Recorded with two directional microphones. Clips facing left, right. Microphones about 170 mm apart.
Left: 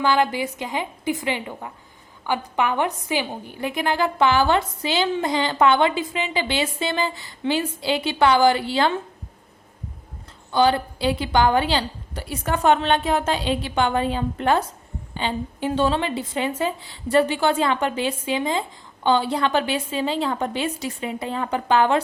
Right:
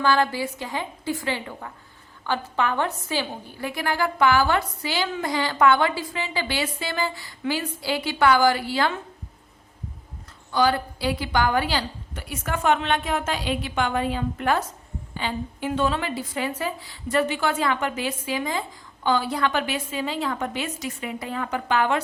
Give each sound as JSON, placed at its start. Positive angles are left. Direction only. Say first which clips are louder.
{"t": 0.0, "sound": "a woman's voice", "louder": "left 1 dB", "side_deg": 15}
{"t": 10.5, "sound": "a woman's voice", "louder": "left 3 dB", "side_deg": 25}